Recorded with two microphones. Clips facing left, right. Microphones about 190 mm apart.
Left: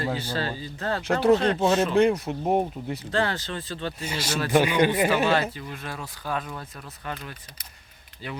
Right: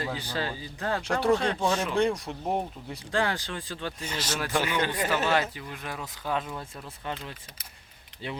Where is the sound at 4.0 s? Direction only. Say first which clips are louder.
Left 4 dB; 10° left (ahead or behind).